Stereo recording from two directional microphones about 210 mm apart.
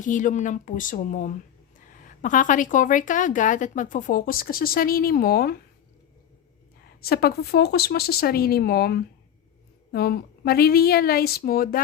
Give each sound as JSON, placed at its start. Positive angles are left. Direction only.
{"t": 0.0, "sound": "a woman's voice", "side_deg": 40}
{"t": 7.0, "sound": "speech", "side_deg": 45}